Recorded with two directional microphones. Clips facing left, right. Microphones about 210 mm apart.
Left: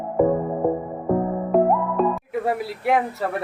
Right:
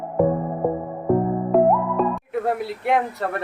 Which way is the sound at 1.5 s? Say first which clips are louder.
Right 1 dB; centre (ahead or behind).